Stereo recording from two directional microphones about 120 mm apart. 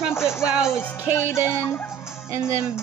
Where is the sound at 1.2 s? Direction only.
20° left (ahead or behind).